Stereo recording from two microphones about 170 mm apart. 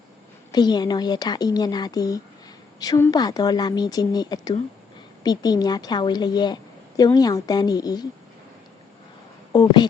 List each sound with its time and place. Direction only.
0.5 s a woman's voice: 25° left (ahead or behind)
9.5 s speech: 25° left (ahead or behind)